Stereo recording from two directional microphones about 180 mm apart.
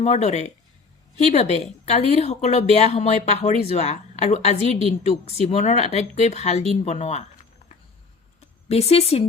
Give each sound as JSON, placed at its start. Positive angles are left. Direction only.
{"t": 0.0, "sound": "a woman's voice", "side_deg": 40}
{"t": 8.4, "sound": "speech", "side_deg": 35}